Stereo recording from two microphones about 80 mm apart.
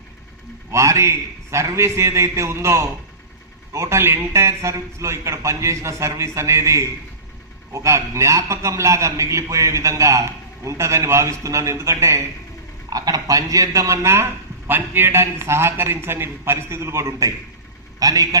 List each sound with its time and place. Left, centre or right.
0.7 s a man's voice: right
12.9 s a man's voice: right